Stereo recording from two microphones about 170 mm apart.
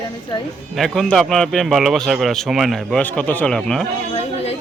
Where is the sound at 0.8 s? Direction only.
Centre (ahead or behind).